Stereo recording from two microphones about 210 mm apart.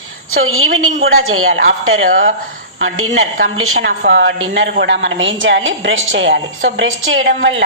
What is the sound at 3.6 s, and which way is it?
A woman's voice, 70° right (ahead or behind).